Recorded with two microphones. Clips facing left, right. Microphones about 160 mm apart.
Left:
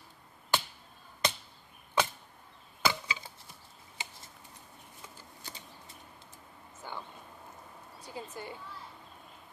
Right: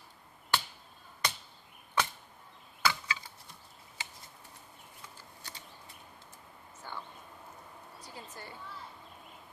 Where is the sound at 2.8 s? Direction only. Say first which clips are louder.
Left 1 dB; 20° left (ahead or behind).